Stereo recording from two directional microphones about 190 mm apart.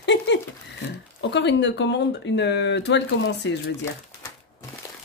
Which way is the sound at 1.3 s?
70° left (ahead or behind).